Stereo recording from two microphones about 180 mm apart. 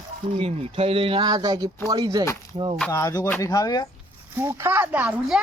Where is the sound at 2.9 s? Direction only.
20° left (ahead or behind).